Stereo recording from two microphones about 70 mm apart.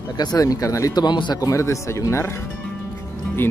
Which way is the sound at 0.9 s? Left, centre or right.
Left.